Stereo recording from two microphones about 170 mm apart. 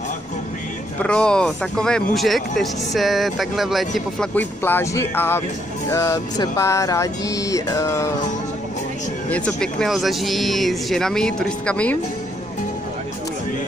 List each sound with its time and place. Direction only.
1.0 s speech: 5° left (ahead or behind)
5.9 s music: 20° left (ahead or behind)
9.3 s speech: 5° left (ahead or behind)